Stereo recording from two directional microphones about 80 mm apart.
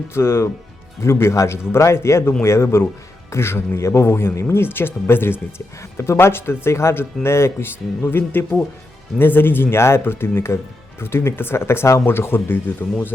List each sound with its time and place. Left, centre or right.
0.1 s speech: left